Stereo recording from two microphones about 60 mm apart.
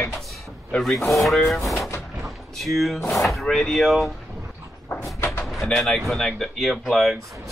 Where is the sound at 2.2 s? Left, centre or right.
Centre.